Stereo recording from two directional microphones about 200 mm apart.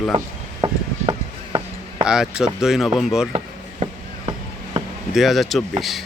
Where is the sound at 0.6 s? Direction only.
25° right (ahead or behind).